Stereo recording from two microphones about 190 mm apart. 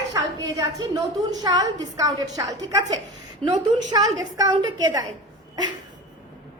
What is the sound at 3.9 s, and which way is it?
A woman's voice, 20° right (ahead or behind).